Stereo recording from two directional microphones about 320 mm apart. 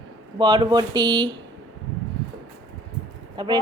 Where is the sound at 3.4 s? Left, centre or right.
Centre.